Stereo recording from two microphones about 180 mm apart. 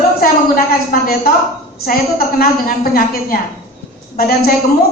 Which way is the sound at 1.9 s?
55° left (ahead or behind).